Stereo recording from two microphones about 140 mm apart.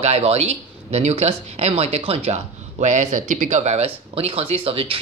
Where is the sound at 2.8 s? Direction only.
60° right (ahead or behind).